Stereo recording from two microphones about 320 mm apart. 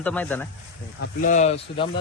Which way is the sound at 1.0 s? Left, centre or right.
Left.